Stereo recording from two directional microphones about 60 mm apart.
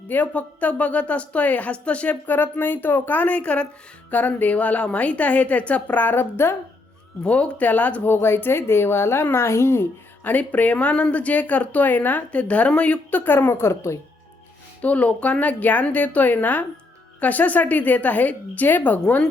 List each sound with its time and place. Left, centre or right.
0.1 s speech: left
7.3 s speech: left
10.2 s speech: left
14.8 s speech: left